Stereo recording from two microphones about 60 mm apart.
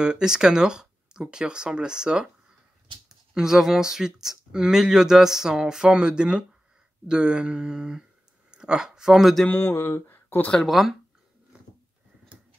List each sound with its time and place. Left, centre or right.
0.0 s speech: centre
9.5 s speech: left
10.6 s speech: centre
11.5 s a sound: centre